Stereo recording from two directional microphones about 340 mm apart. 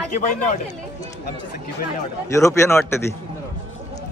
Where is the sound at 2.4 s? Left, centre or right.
Centre.